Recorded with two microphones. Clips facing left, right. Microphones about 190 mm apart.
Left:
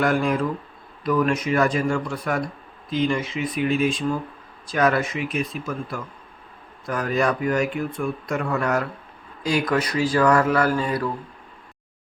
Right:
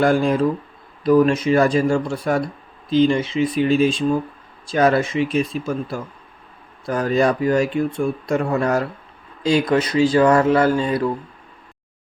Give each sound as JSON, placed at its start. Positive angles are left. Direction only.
{"t": 0.0, "sound": "speech", "side_deg": -30}